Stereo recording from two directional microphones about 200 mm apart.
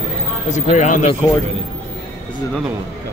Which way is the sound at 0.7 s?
35° left (ahead or behind).